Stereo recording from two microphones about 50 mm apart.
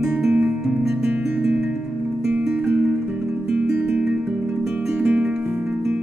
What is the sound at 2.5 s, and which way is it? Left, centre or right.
Music, right.